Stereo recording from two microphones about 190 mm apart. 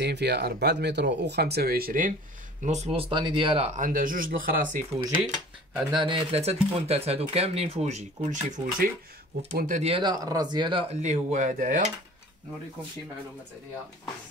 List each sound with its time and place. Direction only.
0.0 s speech: 60° right (ahead or behind)
2.6 s speech: 35° right (ahead or behind)
5.9 s speech: 25° right (ahead or behind); by 11.9 s 40° right (ahead or behind)